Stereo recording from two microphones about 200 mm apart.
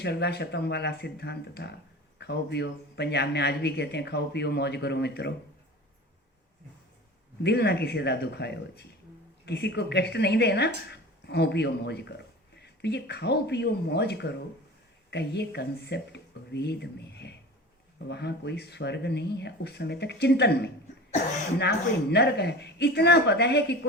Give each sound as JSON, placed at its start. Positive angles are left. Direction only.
{"t": 0.0, "sound": "a man's voice", "side_deg": 55}
{"t": 7.4, "sound": "a man's voice", "side_deg": 55}